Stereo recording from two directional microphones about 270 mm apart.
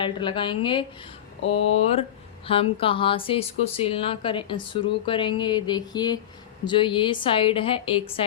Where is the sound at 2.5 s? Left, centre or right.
Centre.